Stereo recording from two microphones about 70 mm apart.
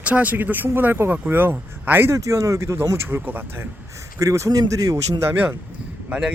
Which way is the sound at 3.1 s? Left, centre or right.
Right.